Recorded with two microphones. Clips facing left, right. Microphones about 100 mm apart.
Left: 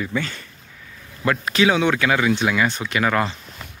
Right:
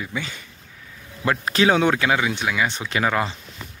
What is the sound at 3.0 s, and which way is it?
Speech, 15° right (ahead or behind).